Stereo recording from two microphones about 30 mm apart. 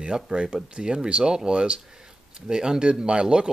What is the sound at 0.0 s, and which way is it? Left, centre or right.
Speech, right.